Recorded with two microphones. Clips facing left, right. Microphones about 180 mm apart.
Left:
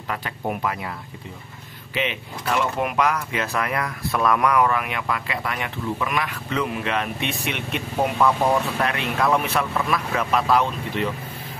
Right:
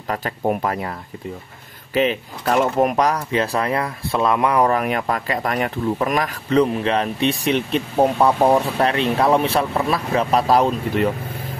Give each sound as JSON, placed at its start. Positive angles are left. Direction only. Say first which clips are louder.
{"t": 0.1, "sound": "speech", "louder": "right 6 dB", "side_deg": -40}
{"t": 2.0, "sound": "speech", "louder": "right 8 dB", "side_deg": -40}